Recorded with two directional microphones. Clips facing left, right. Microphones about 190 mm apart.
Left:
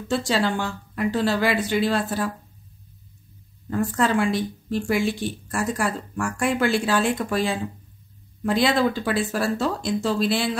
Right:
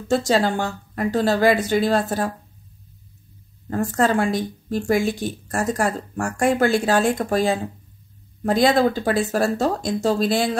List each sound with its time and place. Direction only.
0.1 s speech: 45° right (ahead or behind)
3.7 s speech: 45° right (ahead or behind)